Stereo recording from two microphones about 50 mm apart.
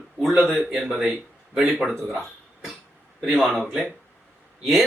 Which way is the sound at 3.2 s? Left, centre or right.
Centre.